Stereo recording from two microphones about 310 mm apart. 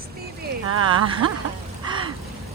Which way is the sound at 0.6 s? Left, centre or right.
Right.